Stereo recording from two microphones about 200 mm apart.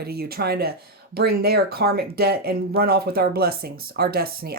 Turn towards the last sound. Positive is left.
turn(degrees=-50)  # may be behind; listen again after turning